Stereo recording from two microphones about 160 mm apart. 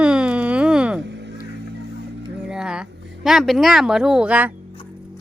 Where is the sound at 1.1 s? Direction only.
90° right.